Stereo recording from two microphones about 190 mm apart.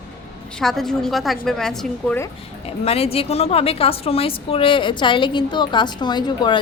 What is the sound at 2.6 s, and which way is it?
A woman's voice, 30° left (ahead or behind).